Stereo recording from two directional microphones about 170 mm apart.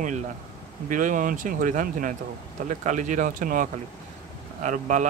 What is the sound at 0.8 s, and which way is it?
Speech, 50° right (ahead or behind).